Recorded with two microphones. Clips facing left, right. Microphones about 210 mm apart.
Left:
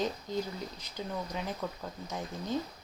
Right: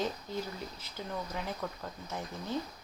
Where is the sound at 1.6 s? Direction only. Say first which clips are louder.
Left 1 dB; 15° left (ahead or behind).